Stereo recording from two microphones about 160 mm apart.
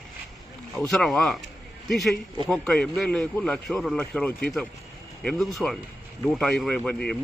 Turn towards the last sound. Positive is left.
turn(degrees=5)  # may be behind; listen again after turning